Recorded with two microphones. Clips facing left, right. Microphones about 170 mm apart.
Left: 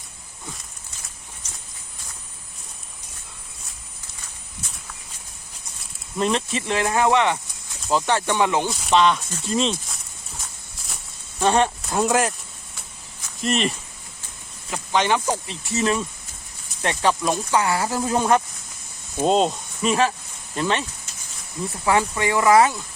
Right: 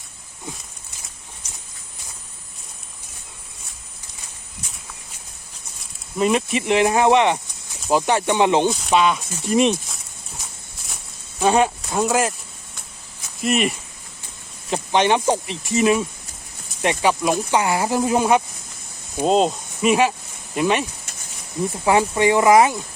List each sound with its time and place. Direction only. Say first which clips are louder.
6.1 s speech: right 4 dB; 10° right (ahead or behind)
8.7 s speech: even; 5° right (ahead or behind)
11.3 s speech: right 2 dB; 10° right (ahead or behind)
13.4 s speech: right 2 dB; 10° right (ahead or behind)
14.7 s speech: right 3 dB; 20° right (ahead or behind)
19.2 s speech: right 1 dB; centre (ahead or behind); by 22.8 s 20° right (ahead or behind)